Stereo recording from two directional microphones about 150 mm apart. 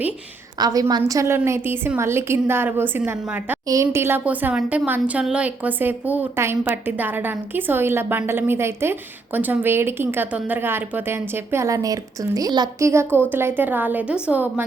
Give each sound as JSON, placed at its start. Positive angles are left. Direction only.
{"t": 0.6, "sound": "speech", "side_deg": -25}